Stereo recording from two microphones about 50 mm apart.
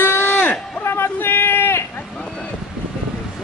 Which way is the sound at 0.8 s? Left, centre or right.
Left.